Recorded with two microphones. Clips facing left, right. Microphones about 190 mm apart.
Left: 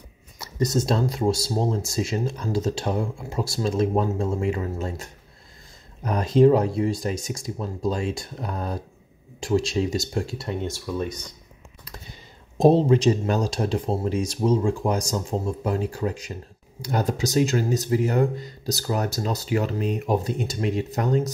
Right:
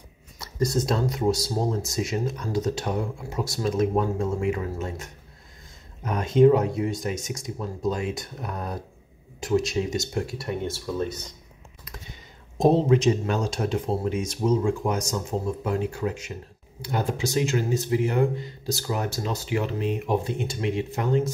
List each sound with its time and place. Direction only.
0.4 s speech: 25° left (ahead or behind)
12.5 s speech: 30° left (ahead or behind)